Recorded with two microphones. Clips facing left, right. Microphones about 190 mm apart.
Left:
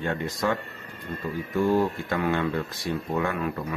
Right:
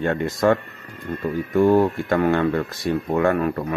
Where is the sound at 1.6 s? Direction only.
55° right (ahead or behind).